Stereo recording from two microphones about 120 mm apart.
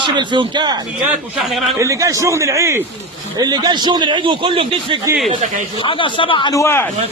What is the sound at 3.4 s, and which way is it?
A man's voice, 35° right (ahead or behind).